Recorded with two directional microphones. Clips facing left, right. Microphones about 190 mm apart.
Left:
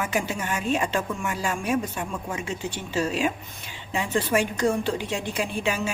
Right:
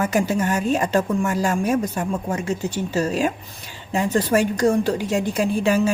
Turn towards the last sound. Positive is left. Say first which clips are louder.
# right 8 dB
turn(degrees=-40)  # may be behind; listen again after turning